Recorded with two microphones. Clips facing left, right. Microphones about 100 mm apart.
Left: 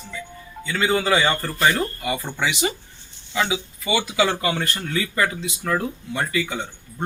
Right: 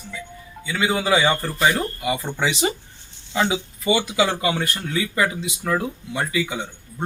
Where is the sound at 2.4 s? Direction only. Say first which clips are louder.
Right 2 dB; 30° right (ahead or behind).